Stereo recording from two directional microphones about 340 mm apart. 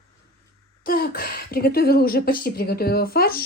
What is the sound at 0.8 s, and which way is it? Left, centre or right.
Speech, left.